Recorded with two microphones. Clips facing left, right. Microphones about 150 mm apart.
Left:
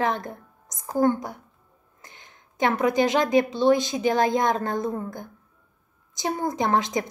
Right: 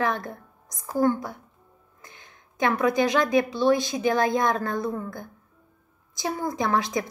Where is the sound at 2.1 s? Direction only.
20° left (ahead or behind).